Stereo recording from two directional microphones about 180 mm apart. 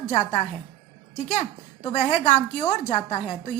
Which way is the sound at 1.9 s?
45° left (ahead or behind).